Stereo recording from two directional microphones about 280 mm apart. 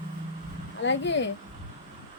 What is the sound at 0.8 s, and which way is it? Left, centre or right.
Speech, left.